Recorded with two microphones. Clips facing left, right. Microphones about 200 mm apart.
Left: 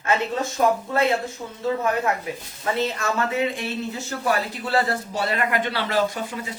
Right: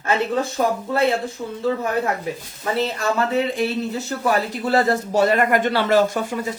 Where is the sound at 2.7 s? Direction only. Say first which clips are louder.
Right 4 dB; 35° right (ahead or behind).